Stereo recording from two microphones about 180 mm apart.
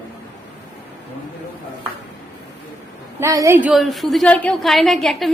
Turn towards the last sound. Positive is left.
turn(degrees=0)  # may be behind; listen again after turning